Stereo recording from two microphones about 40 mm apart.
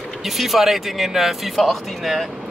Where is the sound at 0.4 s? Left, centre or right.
Centre.